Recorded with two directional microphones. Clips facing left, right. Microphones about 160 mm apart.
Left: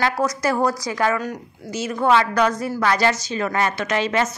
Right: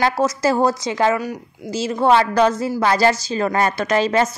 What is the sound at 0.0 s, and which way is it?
A woman's voice, 30° right (ahead or behind).